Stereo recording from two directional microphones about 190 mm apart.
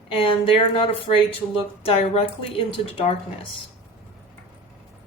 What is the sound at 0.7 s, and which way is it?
Speech, 30° left (ahead or behind).